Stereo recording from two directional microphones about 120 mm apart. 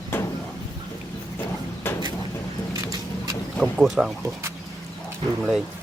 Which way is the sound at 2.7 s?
30° right (ahead or behind).